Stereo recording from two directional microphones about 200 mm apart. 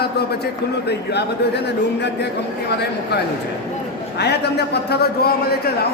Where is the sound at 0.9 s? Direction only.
55° left (ahead or behind).